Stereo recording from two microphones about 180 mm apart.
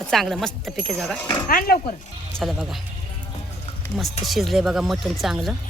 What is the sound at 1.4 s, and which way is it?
Speech, 55° left (ahead or behind).